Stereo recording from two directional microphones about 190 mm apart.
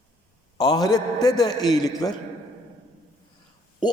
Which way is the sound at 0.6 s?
20° left (ahead or behind).